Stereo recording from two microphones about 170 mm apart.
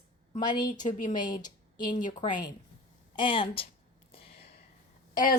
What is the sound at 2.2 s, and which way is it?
Speech, 50° left (ahead or behind).